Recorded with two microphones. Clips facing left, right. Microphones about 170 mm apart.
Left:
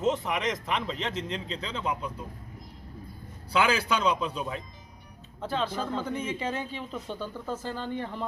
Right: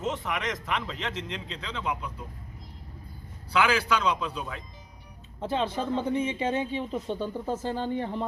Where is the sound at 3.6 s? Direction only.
25° left (ahead or behind).